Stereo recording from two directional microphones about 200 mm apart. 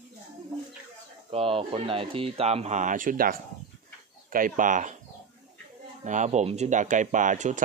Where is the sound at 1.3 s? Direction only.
30° right (ahead or behind).